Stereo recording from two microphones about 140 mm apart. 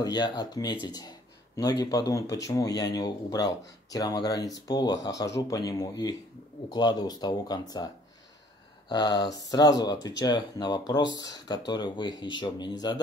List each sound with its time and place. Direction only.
0.0 s speech: 30° left (ahead or behind)